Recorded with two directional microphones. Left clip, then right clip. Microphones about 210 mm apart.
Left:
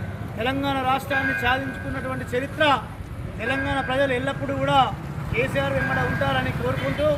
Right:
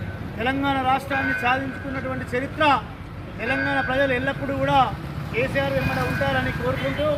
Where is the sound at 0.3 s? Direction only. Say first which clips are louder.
Right 1 dB; 30° left (ahead or behind).